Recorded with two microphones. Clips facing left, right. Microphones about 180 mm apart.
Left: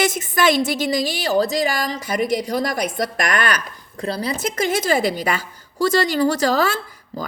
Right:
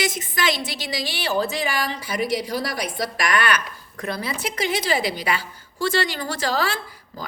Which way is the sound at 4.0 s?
30° left (ahead or behind).